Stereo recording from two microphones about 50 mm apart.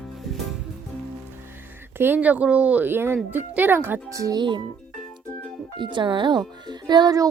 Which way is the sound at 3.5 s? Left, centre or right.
Right.